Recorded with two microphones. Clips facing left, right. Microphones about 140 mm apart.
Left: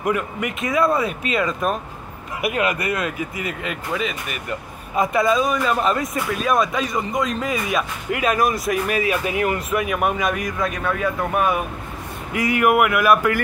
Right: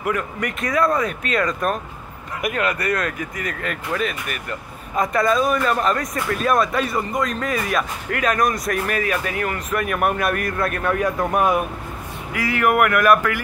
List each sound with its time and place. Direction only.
0.0 s speech: 20° left (ahead or behind)
0.8 s speech: 10° left (ahead or behind)
2.4 s speech: 15° left (ahead or behind)
9.9 s speech: 5° right (ahead or behind)
12.3 s speech: 20° left (ahead or behind)